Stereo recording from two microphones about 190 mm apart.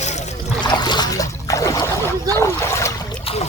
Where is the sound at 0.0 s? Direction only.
35° left (ahead or behind).